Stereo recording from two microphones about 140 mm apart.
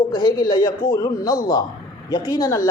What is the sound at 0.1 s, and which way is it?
A woman's voice, 30° left (ahead or behind).